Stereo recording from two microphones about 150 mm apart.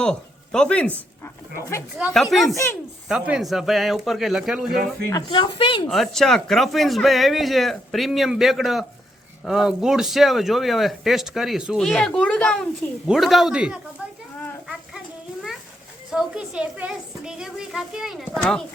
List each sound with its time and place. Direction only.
0.0 s speech: 5° left (ahead or behind)
2.0 s speech: centre (ahead or behind)
4.7 s speech: 75° right (ahead or behind)
5.1 s speech: 35° left (ahead or behind)
5.9 s speech: centre (ahead or behind)
14.3 s a sound: 10° left (ahead or behind)
16.1 s speech: 5° right (ahead or behind)